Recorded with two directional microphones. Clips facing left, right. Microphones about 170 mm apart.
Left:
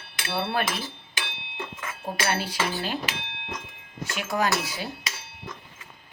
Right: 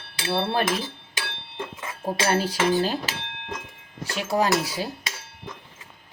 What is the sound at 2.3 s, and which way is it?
Cutlery, 40° right (ahead or behind).